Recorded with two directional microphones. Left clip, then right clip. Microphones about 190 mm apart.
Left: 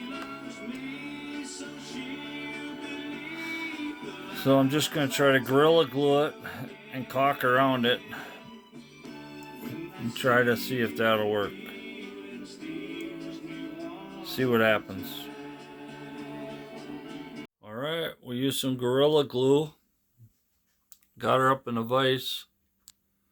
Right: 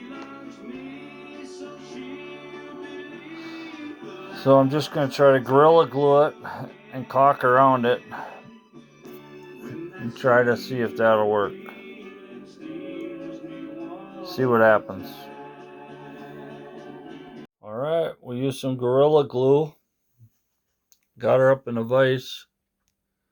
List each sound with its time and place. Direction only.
4.4 s speech: 40° left (ahead or behind)
10.2 s speech: 35° left (ahead or behind)
14.2 s speech: 30° left (ahead or behind)
17.7 s speech: 5° left (ahead or behind)
21.2 s speech: 5° left (ahead or behind)